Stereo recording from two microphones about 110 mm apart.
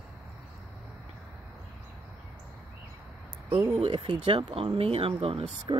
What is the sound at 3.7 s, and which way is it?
Speech, 60° right (ahead or behind).